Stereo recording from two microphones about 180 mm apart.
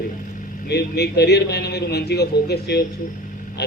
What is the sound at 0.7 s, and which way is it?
Speech, 65° left (ahead or behind).